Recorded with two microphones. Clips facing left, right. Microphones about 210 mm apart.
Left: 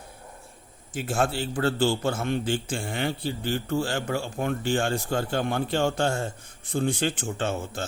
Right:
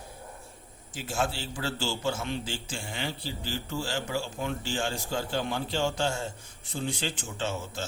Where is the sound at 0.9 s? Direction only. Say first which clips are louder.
Left 5 dB; 55° left (ahead or behind).